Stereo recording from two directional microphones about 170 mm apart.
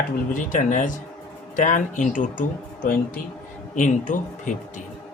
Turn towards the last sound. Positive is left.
turn(degrees=50)  # may be behind; listen again after turning